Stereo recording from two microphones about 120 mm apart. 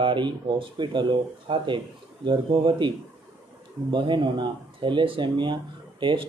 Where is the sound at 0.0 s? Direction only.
45° right (ahead or behind).